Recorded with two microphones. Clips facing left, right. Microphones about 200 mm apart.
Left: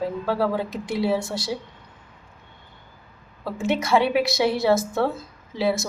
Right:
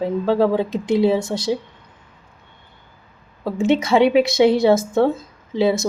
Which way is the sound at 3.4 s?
20° right (ahead or behind).